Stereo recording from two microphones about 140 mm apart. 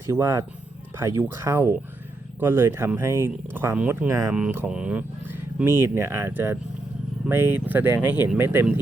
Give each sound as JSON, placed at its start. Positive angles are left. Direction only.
{"t": 0.1, "sound": "speech", "side_deg": -20}